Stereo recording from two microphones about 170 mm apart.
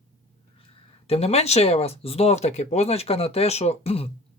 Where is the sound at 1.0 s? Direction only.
35° left (ahead or behind).